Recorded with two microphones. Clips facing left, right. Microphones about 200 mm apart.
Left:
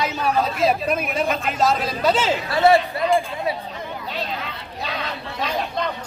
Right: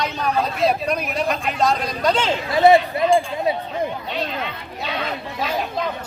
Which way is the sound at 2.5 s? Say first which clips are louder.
Right 3 dB; 20° right (ahead or behind).